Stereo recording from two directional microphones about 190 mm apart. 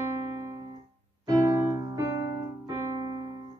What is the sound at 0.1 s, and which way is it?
Keyboard, 15° right (ahead or behind).